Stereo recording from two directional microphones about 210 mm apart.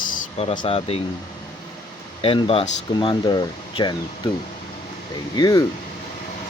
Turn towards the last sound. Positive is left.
turn(degrees=20)  # may be behind; listen again after turning